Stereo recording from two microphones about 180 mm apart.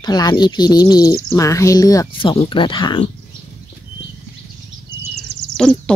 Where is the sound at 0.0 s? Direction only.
20° left (ahead or behind).